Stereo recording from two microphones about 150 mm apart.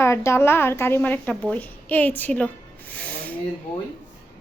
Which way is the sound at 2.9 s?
10° left (ahead or behind).